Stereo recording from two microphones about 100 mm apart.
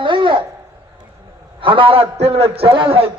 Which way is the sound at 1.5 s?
60° right (ahead or behind).